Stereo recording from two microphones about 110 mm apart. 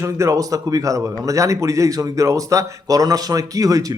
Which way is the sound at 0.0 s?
25° right (ahead or behind).